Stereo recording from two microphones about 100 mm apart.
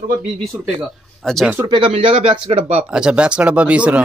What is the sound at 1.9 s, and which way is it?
Speech, 70° right (ahead or behind).